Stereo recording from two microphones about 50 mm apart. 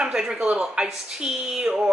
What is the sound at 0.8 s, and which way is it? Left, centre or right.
A man's voice, centre.